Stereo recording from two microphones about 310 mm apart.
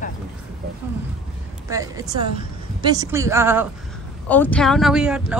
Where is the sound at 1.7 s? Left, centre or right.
Centre.